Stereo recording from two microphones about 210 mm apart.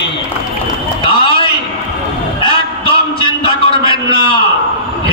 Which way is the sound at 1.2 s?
25° left (ahead or behind).